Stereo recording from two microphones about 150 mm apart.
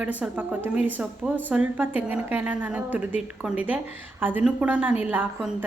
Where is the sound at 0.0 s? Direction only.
10° right (ahead or behind).